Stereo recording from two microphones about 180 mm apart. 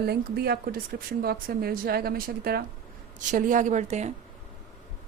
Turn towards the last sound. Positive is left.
turn(degrees=-40)  # may be behind; listen again after turning